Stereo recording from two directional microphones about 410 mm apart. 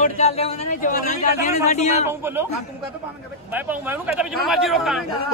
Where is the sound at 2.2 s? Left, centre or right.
Centre.